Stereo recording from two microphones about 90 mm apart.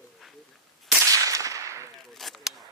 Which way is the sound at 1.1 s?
40° right (ahead or behind).